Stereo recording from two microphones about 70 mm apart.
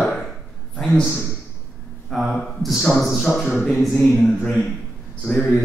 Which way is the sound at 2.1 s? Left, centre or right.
Centre.